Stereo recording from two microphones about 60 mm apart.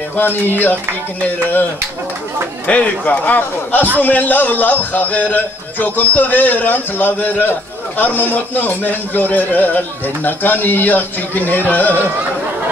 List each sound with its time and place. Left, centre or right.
0.1 s a man's voice: left
2.6 s a man's voice: left